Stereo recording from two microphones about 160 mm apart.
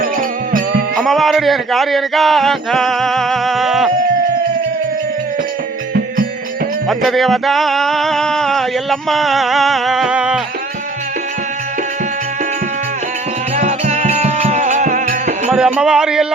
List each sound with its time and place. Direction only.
0.0 s music: 60° right (ahead or behind)
0.9 s a sound: centre (ahead or behind)
6.8 s music: centre (ahead or behind)
13.6 s music: 45° right (ahead or behind)
15.4 s speech: 5° right (ahead or behind)